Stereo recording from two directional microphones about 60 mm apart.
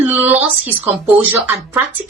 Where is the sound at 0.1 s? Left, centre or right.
Right.